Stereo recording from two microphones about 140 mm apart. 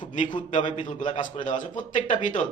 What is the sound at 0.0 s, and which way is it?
A man's voice, 65° left (ahead or behind).